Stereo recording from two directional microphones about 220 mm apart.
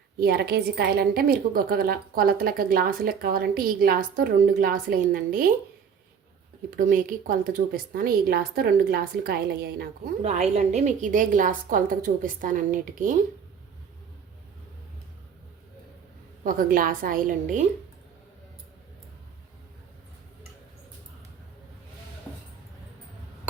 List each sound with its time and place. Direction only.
0.2 s a woman's voice: 45° right (ahead or behind)
6.7 s a woman's voice: 40° right (ahead or behind)
10.2 s a woman's voice: 30° right (ahead or behind)
16.4 s a woman's voice: 40° right (ahead or behind)